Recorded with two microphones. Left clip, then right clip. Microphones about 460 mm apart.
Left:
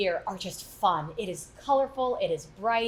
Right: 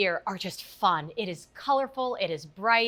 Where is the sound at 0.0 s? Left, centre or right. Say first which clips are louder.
Right 1 dB; right.